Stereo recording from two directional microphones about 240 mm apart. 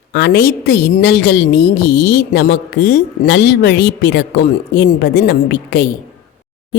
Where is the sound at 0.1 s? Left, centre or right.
Left.